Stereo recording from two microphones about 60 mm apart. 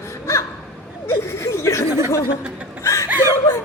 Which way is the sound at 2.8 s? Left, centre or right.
Left.